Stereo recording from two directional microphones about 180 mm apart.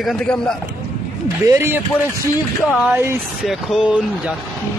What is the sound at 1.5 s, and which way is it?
Speech, 15° right (ahead or behind).